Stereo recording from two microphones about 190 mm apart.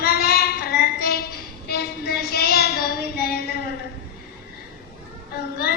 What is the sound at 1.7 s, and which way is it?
Child singing, 55° left (ahead or behind).